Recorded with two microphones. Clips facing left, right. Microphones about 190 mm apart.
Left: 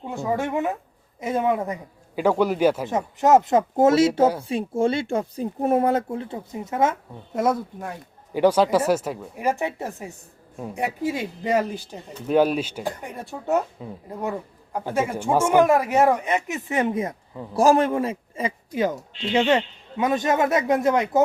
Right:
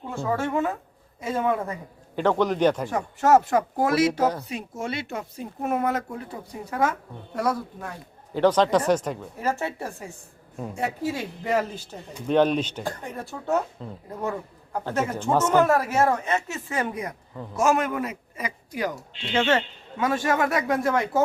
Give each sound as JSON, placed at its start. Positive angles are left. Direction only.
{"t": 0.0, "sound": "speech", "side_deg": 15}
{"t": 2.9, "sound": "speech", "side_deg": 20}
{"t": 8.3, "sound": "speech", "side_deg": 10}